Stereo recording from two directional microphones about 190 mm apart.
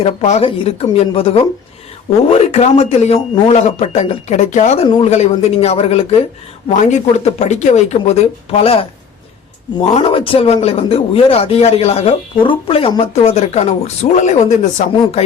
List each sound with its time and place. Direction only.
0.0 s speech: 35° left (ahead or behind)
9.9 s speech: 30° left (ahead or behind)